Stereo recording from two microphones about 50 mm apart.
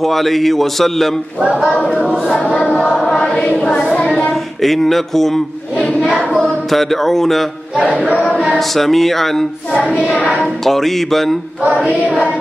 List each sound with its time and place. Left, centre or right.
0.0 s female singing: centre
2.3 s a sound: centre
4.3 s speech: centre
5.9 s a sound: centre
6.4 s mantra: centre
8.1 s choir: left
8.5 s female singing: centre